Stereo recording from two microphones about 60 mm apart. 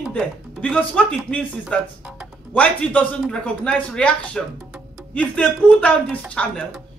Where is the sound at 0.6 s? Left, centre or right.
Left.